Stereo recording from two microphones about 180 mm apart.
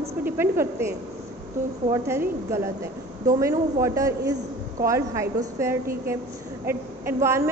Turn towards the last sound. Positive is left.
turn(degrees=-15)  # may be behind; listen again after turning